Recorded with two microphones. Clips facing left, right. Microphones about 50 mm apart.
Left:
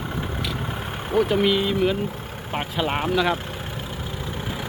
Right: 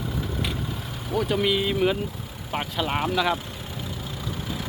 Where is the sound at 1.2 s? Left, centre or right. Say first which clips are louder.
Right 1 dB; centre.